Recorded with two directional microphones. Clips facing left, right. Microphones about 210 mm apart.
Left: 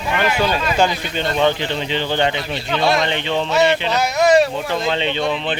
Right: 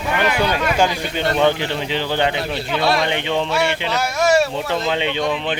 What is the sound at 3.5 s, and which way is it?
A man's voice, 20° left (ahead or behind).